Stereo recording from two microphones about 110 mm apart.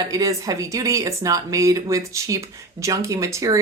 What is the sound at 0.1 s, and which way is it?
Speech, 30° right (ahead or behind).